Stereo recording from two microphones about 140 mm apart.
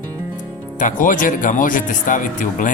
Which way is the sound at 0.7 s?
70° left (ahead or behind).